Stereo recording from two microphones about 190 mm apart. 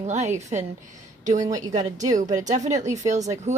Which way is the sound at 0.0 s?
35° right (ahead or behind).